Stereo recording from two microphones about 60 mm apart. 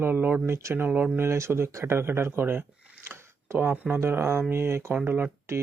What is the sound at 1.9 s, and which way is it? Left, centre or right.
Speech, right.